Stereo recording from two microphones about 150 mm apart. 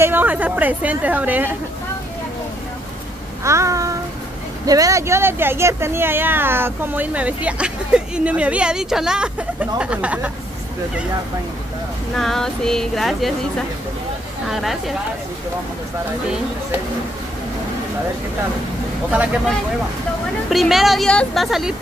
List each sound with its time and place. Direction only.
0.0 s speech: 10° right (ahead or behind)
3.4 s child singing: 20° right (ahead or behind)
4.6 s speech: 20° right (ahead or behind)
12.2 s a woman's voice: 5° left (ahead or behind)
14.5 s a woman's voice: centre (ahead or behind)
20.4 s a woman's voice: centre (ahead or behind)